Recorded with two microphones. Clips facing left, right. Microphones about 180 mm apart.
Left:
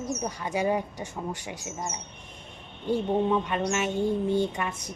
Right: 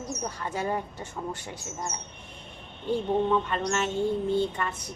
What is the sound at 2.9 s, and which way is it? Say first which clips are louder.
Speech: even; 10° left (ahead or behind).